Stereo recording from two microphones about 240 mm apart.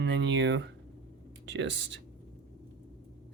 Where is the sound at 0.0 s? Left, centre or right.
Right.